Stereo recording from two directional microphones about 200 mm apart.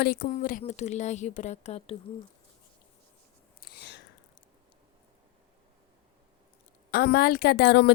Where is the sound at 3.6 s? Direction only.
50° left (ahead or behind).